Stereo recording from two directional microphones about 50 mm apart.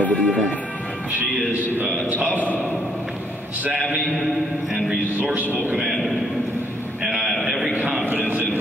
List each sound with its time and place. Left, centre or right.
0.0 s speech: left
1.5 s speech: right
5.2 s speech: right
5.9 s a man's voice: centre
7.0 s sheep: centre
8.1 s a sound: right